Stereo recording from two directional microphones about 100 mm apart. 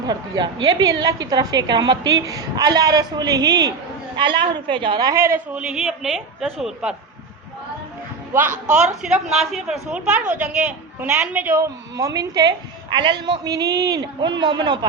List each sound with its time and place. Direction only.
0.1 s a woman's voice: 45° right (ahead or behind)
4.2 s a woman's voice: 55° right (ahead or behind)
5.1 s a woman's voice: 25° right (ahead or behind)
5.5 s a woman's voice: 5° right (ahead or behind)
8.3 s a woman's voice: 20° right (ahead or behind)
8.7 s a woman's voice: 10° right (ahead or behind)
11.5 s a woman's voice: 30° right (ahead or behind); by 14.8 s 45° right (ahead or behind)